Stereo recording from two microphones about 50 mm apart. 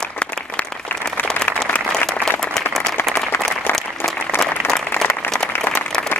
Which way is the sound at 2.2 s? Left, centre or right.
Centre.